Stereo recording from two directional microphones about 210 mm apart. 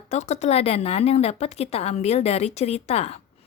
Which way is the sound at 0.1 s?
35° left (ahead or behind).